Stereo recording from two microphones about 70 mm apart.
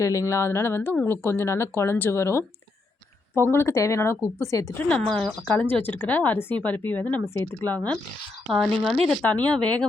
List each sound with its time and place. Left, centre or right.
0.0 s speech: left
4.8 s speech: centre
5.0 s speech: centre
5.5 s speech: left
8.5 s speech: centre
9.2 s speech: left